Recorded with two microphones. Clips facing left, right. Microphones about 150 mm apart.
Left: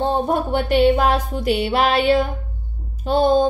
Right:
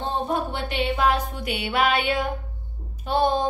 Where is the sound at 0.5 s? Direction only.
40° left (ahead or behind).